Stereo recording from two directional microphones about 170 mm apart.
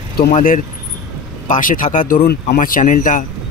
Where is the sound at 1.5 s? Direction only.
50° left (ahead or behind).